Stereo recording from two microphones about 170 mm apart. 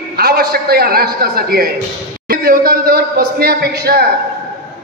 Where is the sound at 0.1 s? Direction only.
65° right (ahead or behind).